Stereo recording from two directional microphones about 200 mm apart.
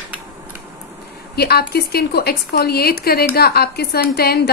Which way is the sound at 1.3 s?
50° left (ahead or behind).